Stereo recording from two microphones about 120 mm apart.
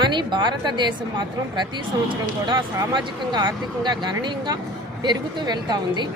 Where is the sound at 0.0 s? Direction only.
40° right (ahead or behind).